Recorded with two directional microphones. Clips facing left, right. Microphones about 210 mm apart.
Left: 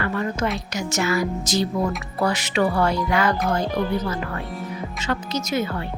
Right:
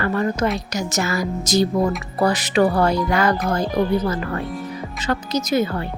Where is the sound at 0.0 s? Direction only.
40° right (ahead or behind).